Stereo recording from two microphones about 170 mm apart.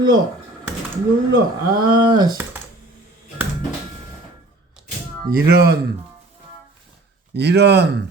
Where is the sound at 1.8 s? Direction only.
25° right (ahead or behind).